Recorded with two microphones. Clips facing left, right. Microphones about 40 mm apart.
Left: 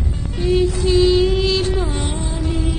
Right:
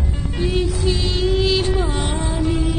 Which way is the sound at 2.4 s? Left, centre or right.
Right.